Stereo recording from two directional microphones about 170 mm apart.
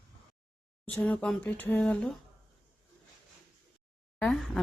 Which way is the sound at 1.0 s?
5° left (ahead or behind).